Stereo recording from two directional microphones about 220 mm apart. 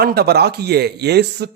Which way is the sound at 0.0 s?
45° right (ahead or behind).